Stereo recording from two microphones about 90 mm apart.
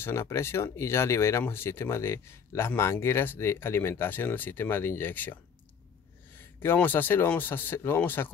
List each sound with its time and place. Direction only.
0.0 s speech: 30° left (ahead or behind)
6.6 s speech: 20° left (ahead or behind)